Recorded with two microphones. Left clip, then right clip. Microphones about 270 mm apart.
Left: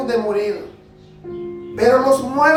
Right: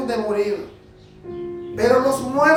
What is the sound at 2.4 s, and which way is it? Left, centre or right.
Speech, centre.